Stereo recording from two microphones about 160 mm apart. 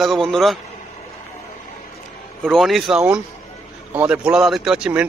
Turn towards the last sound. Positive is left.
turn(degrees=-5)  # may be behind; listen again after turning